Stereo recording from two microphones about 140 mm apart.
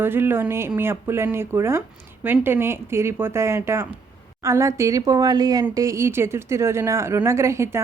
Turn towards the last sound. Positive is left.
turn(degrees=-20)  # may be behind; listen again after turning